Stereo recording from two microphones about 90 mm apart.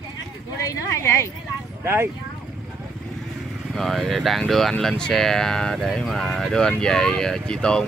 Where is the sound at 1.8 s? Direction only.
30° right (ahead or behind).